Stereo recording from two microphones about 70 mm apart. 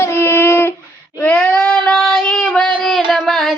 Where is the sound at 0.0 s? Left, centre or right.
Left.